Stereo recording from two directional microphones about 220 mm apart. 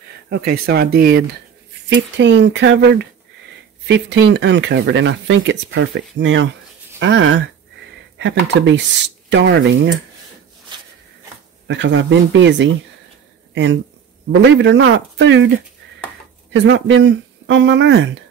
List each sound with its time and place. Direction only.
0.3 s speech: 45° right (ahead or behind)
1.9 s speech: 55° right (ahead or behind)
10.7 s a sound: 20° right (ahead or behind)
11.6 s speech: 55° right (ahead or behind)
14.3 s speech: 55° right (ahead or behind)
16.5 s speech: 55° right (ahead or behind)